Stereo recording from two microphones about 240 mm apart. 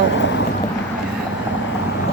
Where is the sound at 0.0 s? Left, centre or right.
Left.